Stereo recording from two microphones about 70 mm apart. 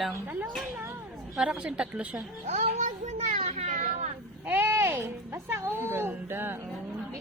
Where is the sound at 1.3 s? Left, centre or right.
Centre.